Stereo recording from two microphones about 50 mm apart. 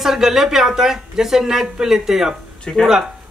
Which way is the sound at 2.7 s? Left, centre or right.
Left.